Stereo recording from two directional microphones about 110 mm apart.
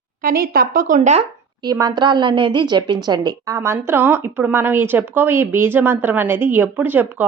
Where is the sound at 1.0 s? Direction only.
85° right.